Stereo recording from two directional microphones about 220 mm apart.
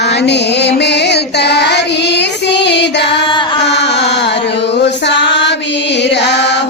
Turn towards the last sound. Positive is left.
turn(degrees=50)  # may be behind; listen again after turning